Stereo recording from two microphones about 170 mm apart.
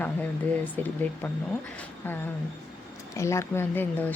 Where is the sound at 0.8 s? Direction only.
10° left (ahead or behind).